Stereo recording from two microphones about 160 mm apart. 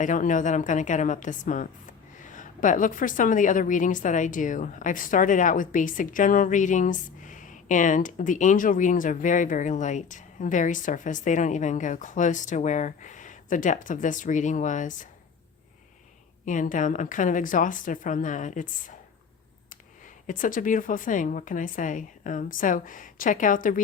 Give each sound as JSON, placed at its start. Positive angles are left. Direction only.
{"t": 0.0, "sound": "a woman's voice", "side_deg": 55}
{"t": 16.5, "sound": "a woman's voice", "side_deg": 55}
{"t": 20.2, "sound": "a woman's voice", "side_deg": 55}